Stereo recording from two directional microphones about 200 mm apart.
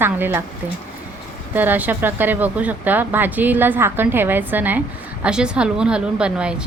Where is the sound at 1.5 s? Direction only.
10° right (ahead or behind).